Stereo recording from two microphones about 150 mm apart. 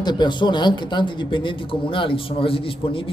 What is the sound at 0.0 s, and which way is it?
A man's voice, 30° left (ahead or behind).